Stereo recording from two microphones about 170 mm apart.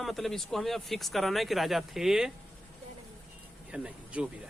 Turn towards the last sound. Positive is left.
turn(degrees=-5)  # may be behind; listen again after turning